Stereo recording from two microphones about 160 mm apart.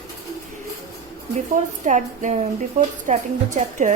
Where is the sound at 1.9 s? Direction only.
50° right (ahead or behind).